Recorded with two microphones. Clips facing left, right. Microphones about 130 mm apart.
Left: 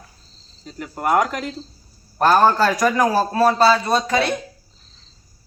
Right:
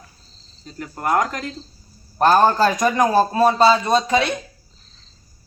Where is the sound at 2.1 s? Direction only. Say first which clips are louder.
Even; 15° right (ahead or behind).